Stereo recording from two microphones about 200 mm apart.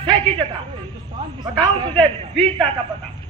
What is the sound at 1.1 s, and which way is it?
Speech, 25° right (ahead or behind).